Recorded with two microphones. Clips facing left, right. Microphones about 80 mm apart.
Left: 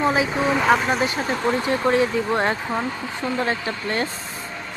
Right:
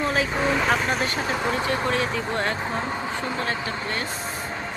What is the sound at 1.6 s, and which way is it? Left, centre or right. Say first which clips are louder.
Speech: left 5 dB; left.